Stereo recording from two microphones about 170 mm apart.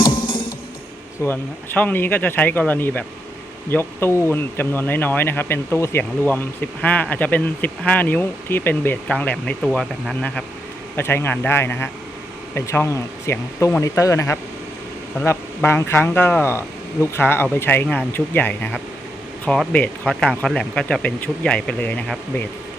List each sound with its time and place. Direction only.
0.0 s music: 30° left (ahead or behind)
1.2 s speech: 10° left (ahead or behind)
10.9 s speech: 15° left (ahead or behind)